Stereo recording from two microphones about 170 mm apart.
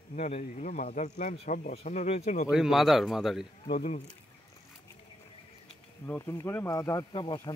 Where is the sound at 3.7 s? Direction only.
45° left (ahead or behind).